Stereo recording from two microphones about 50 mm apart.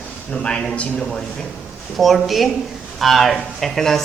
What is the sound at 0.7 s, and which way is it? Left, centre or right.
Speech, left.